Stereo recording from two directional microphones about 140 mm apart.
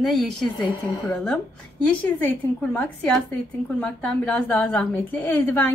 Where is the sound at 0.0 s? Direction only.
Centre (ahead or behind).